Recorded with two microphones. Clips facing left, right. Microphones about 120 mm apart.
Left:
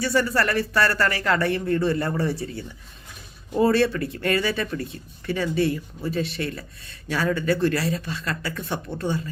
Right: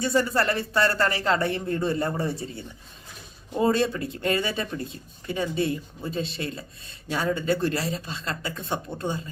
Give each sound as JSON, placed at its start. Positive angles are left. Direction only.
{"t": 0.0, "sound": "speech", "side_deg": -25}